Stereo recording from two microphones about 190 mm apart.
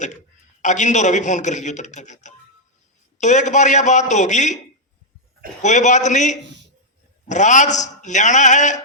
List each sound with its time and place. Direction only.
0.6 s a man's voice: 40° left (ahead or behind)
5.6 s a man's voice: 40° left (ahead or behind)